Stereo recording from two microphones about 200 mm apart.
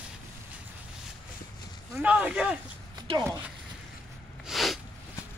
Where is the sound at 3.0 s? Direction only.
20° right (ahead or behind).